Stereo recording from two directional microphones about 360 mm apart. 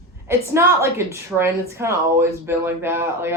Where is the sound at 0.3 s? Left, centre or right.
Centre.